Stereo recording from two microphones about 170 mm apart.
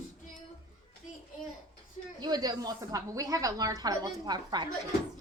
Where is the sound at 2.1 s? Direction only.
25° right (ahead or behind).